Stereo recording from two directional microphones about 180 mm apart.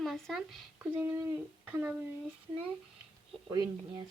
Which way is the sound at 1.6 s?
10° right (ahead or behind).